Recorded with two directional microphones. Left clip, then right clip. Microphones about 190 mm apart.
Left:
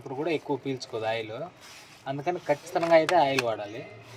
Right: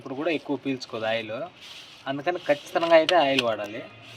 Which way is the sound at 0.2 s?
10° right (ahead or behind).